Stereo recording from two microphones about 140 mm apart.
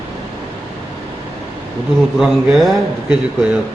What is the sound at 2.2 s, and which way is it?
A man's voice, centre (ahead or behind).